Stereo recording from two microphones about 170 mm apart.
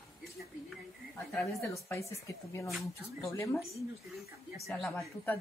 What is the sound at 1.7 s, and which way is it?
Speech, 15° left (ahead or behind).